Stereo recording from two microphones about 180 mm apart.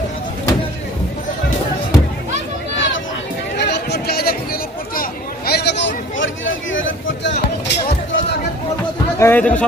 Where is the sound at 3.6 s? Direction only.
70° left (ahead or behind); by 7.3 s 90° left.